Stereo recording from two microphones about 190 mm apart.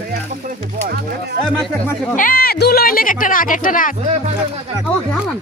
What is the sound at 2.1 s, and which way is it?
Speech, 50° left (ahead or behind).